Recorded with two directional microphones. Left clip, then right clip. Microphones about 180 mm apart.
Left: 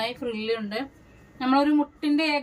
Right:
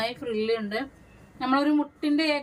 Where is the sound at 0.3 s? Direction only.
40° left (ahead or behind).